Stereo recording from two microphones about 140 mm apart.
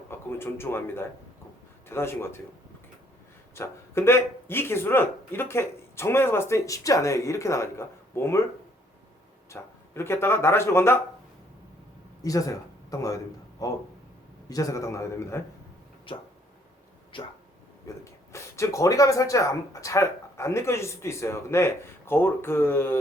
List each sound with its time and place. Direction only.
0.1 s a man's voice: 15° left (ahead or behind)
3.5 s speech: 20° left (ahead or behind)
9.5 s speech: 15° left (ahead or behind)
12.2 s speech: 25° left (ahead or behind)
16.1 s a sound: 40° left (ahead or behind)
17.8 s speech: 20° left (ahead or behind)